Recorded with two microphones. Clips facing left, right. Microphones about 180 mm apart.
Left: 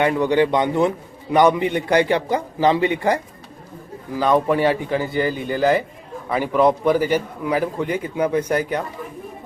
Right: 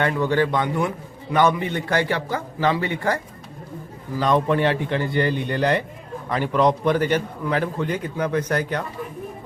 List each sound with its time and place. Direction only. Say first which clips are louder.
0.0 s a man's voice: left 3 dB; 15° left (ahead or behind)
4.2 s a man's voice: left 2 dB; 5° left (ahead or behind)